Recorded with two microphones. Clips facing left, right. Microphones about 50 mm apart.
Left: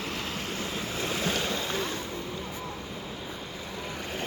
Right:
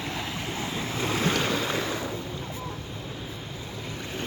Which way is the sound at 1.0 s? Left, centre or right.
Right.